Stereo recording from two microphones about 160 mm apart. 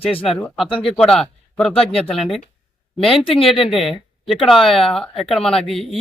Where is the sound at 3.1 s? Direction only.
35° left (ahead or behind).